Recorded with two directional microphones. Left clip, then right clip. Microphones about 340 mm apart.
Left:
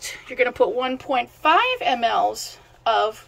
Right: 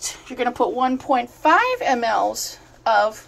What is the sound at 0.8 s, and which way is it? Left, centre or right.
Speech, centre.